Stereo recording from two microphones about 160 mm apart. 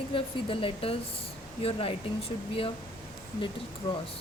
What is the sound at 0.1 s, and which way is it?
Speech, 35° left (ahead or behind).